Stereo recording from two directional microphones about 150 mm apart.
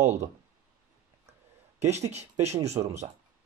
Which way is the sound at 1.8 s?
45° right (ahead or behind).